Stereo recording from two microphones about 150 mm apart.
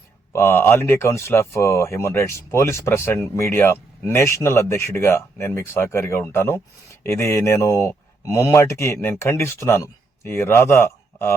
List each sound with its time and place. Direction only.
0.3 s speech: 15° left (ahead or behind)